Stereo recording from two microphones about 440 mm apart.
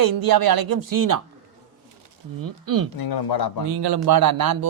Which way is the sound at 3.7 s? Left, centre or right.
Right.